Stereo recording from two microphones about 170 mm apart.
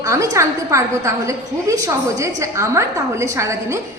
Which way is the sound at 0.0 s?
20° right (ahead or behind).